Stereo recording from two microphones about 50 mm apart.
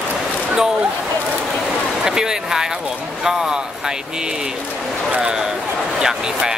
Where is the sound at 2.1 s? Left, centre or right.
Centre.